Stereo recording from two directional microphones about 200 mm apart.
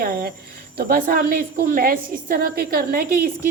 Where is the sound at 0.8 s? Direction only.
45° right (ahead or behind).